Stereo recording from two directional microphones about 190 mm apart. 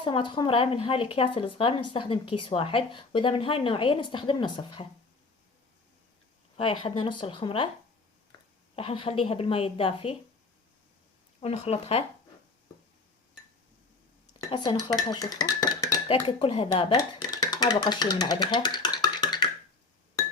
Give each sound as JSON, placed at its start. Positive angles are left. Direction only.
{"t": 0.0, "sound": "speech", "side_deg": 25}
{"t": 6.6, "sound": "speech", "side_deg": 30}
{"t": 8.7, "sound": "speech", "side_deg": 30}
{"t": 11.3, "sound": "speech", "side_deg": 35}
{"t": 14.5, "sound": "speech", "side_deg": 25}